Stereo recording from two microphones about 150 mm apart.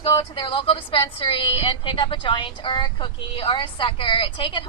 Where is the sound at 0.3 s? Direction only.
35° left (ahead or behind).